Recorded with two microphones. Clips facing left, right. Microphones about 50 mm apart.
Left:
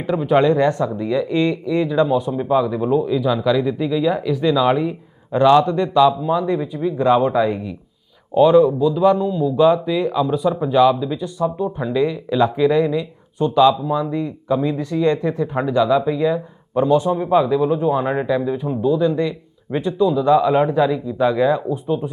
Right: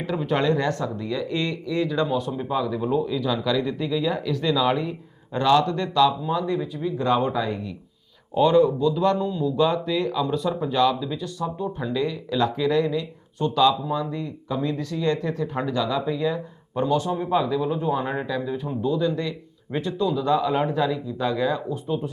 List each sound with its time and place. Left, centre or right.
0.0 s speech: centre
8.4 s speech: centre